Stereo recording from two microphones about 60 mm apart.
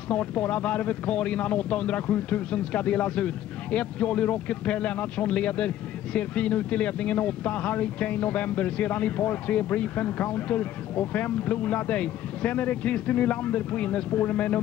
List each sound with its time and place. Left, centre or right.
0.1 s speech: left